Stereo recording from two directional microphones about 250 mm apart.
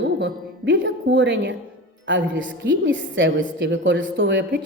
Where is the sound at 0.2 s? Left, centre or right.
Right.